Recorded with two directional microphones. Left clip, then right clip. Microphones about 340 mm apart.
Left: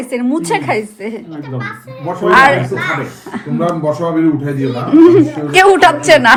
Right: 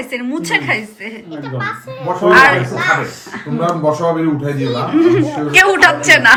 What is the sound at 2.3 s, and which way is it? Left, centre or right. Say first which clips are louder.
Speech: left 1 dB; centre.